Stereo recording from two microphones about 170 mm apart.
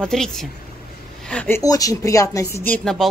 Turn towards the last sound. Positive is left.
turn(degrees=0)  # may be behind; listen again after turning